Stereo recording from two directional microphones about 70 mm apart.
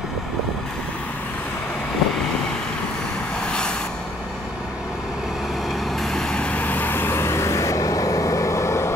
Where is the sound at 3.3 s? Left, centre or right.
Centre.